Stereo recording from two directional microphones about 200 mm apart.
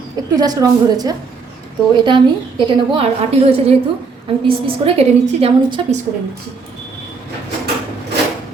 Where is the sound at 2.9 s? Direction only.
30° right (ahead or behind).